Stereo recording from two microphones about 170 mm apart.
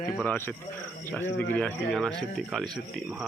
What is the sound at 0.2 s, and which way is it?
Speech, 10° left (ahead or behind).